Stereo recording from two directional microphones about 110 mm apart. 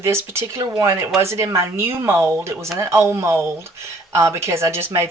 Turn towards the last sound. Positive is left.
turn(degrees=-25)  # may be behind; listen again after turning